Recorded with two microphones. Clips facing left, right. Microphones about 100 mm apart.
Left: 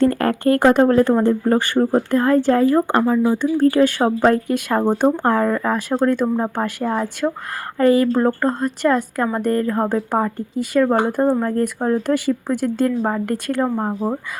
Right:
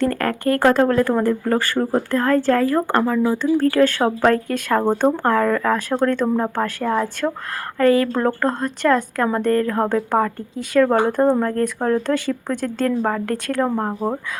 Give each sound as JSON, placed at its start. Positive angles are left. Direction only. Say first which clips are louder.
{"t": 0.1, "sound": "a woman's voice", "louder": "left 3 dB", "side_deg": 25}